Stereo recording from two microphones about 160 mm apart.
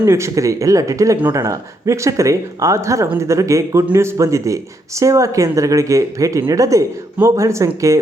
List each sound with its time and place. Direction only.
0.0 s speech: 20° right (ahead or behind)